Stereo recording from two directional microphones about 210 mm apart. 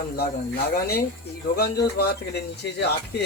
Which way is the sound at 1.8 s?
50° left (ahead or behind).